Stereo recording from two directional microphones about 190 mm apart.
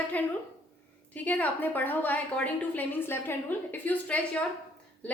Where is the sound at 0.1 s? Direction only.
10° left (ahead or behind).